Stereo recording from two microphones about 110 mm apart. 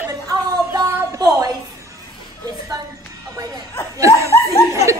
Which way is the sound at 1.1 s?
35° right (ahead or behind).